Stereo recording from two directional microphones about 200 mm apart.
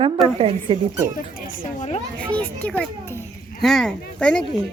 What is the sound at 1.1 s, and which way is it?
Speech, 40° left (ahead or behind).